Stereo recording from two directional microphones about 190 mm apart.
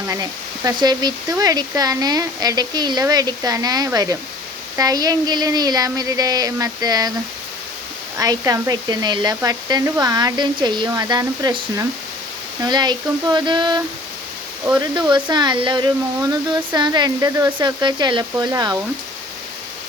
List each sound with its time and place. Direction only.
0.1 s speech: 20° right (ahead or behind)
8.2 s speech: 20° right (ahead or behind)
15.1 s speech: 25° right (ahead or behind)